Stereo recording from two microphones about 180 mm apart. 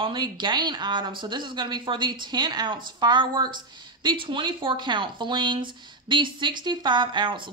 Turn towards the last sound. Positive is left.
turn(degrees=-25)  # may be behind; listen again after turning